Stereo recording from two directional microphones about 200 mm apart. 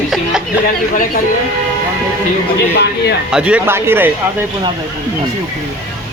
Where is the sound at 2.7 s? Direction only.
60° left (ahead or behind).